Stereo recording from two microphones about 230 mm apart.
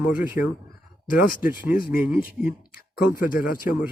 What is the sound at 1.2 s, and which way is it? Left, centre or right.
Speech, left.